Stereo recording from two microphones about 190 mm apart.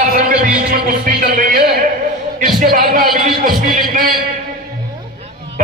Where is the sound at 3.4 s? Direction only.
50° right (ahead or behind).